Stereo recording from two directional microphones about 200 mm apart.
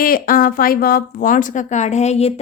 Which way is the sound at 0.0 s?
45° left (ahead or behind).